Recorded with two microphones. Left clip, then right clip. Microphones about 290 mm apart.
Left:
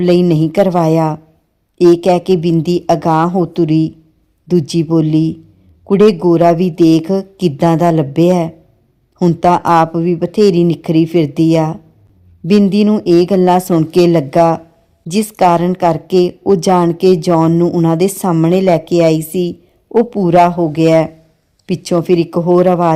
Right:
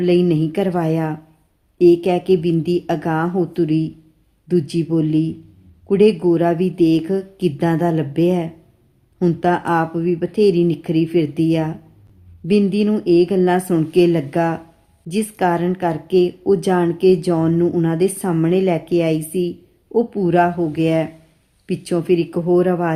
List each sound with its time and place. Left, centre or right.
0.0 s a woman's voice: left